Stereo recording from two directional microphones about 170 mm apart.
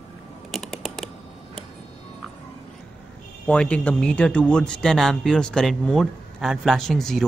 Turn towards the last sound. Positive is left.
turn(degrees=0)  # may be behind; listen again after turning